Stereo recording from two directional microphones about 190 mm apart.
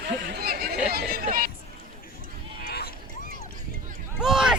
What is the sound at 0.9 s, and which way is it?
Chatter, 50° right (ahead or behind).